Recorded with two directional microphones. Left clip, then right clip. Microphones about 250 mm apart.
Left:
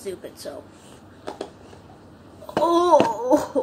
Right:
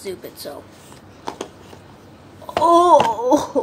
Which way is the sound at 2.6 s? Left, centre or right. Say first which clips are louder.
Right 5 dB; centre.